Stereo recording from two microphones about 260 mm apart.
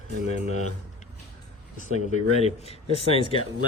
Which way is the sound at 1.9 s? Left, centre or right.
Left.